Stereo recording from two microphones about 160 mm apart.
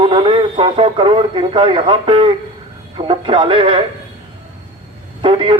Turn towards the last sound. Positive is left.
turn(degrees=-30)  # may be behind; listen again after turning